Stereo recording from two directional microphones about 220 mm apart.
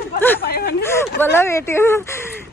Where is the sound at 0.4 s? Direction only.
45° left (ahead or behind).